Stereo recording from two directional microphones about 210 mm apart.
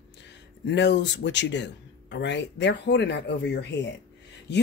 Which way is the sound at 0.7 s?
55° left (ahead or behind).